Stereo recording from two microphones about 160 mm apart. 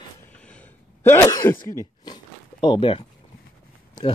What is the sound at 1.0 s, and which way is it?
Speech, 20° left (ahead or behind).